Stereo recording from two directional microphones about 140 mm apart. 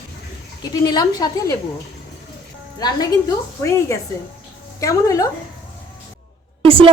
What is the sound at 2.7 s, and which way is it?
A woman's voice, 30° left (ahead or behind).